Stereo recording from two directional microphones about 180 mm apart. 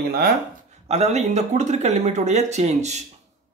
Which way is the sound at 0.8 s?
35° right (ahead or behind).